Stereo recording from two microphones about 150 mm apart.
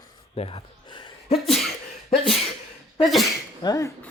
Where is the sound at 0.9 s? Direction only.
30° left (ahead or behind).